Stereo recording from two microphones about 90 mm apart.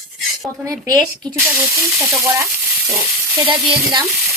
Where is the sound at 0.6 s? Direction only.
40° right (ahead or behind).